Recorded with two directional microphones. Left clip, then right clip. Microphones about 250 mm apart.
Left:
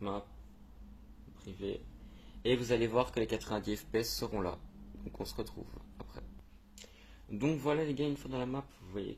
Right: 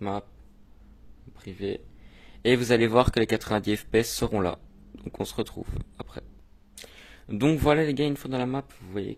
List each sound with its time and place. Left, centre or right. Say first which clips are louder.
1.4 s speech: right 8 dB; right
7.2 s speech: right 11 dB; right